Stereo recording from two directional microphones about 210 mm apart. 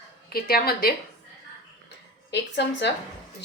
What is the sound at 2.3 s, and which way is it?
Speech, 55° left (ahead or behind).